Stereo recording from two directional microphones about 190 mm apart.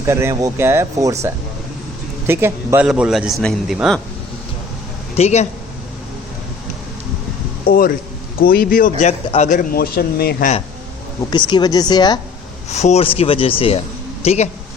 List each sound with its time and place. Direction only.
0.0 s a man's voice: 15° right (ahead or behind)
5.1 s speech: 35° left (ahead or behind)
7.7 s a man's voice: 50° left (ahead or behind)
11.2 s speech: 20° left (ahead or behind)
12.7 s speech: 35° left (ahead or behind)